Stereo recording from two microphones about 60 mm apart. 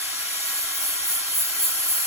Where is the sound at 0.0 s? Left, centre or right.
Right.